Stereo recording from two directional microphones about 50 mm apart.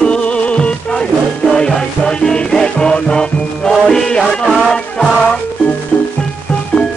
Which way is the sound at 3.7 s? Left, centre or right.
Centre.